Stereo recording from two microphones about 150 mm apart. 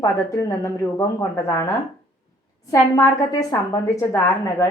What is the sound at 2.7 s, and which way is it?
A woman's voice, 25° left (ahead or behind).